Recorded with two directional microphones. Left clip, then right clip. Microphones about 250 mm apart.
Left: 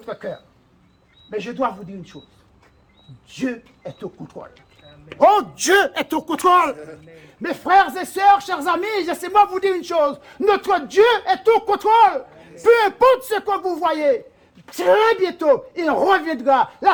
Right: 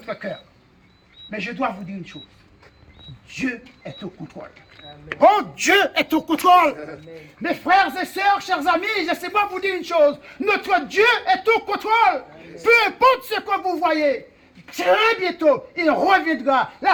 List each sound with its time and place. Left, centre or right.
4.2 s speech: left; by 6.7 s centre
7.2 s speech: left